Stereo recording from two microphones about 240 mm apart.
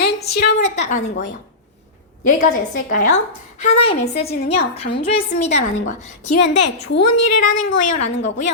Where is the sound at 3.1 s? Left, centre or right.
Left.